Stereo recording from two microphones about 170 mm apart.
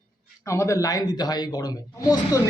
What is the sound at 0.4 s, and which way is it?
Speech, 20° left (ahead or behind).